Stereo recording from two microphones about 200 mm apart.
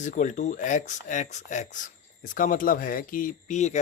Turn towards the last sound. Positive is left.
turn(degrees=35)  # may be behind; listen again after turning